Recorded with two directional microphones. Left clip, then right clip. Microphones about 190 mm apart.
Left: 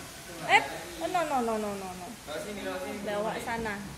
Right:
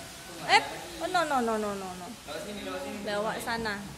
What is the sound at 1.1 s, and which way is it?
Speech, 20° right (ahead or behind).